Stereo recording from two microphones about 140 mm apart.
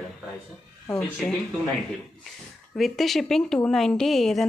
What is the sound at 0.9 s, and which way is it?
A woman's voice, 5° left (ahead or behind).